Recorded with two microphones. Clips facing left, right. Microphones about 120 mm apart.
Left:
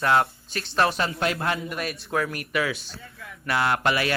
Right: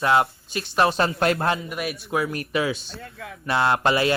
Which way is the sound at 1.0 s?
30° right (ahead or behind).